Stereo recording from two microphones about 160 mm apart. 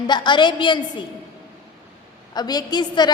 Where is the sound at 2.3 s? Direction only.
25° left (ahead or behind).